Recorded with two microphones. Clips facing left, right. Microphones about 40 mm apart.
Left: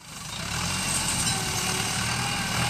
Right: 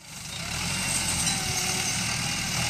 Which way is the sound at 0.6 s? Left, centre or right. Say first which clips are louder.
Left 1 dB; centre.